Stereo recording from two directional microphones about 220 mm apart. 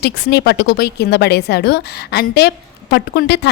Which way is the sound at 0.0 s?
50° left (ahead or behind).